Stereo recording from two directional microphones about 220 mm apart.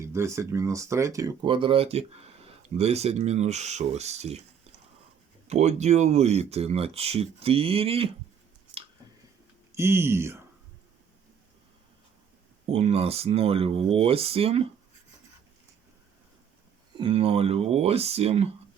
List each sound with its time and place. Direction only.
0.0 s speech: 10° right (ahead or behind); by 4.4 s 30° right (ahead or behind)
5.5 s speech: 30° right (ahead or behind)
9.7 s speech: 10° right (ahead or behind)
12.6 s speech: 25° right (ahead or behind)
17.0 s speech: 25° right (ahead or behind)